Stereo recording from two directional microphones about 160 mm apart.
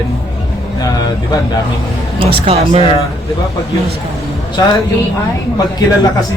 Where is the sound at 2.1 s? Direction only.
35° right (ahead or behind).